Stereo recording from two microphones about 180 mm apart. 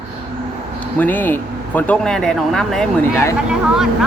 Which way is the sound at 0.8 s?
10° left (ahead or behind).